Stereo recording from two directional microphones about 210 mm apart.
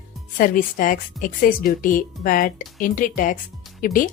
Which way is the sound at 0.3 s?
40° left (ahead or behind).